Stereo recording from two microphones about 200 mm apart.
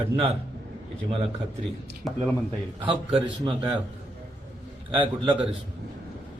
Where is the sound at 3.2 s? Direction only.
20° right (ahead or behind).